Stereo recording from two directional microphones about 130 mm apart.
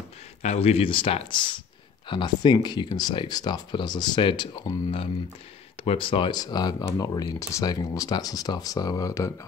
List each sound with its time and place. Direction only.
0.4 s speech: 55° left (ahead or behind); by 4.5 s 35° left (ahead or behind)
5.9 s speech: 40° left (ahead or behind); by 9.3 s 25° left (ahead or behind)